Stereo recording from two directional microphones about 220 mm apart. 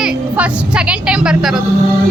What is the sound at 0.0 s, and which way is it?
Speech, 5° right (ahead or behind).